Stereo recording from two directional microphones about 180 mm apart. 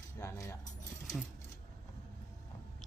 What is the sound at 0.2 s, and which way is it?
Keys jangling, 15° left (ahead or behind).